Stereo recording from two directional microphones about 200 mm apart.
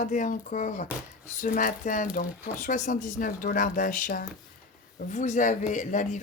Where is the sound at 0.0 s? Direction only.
40° left (ahead or behind).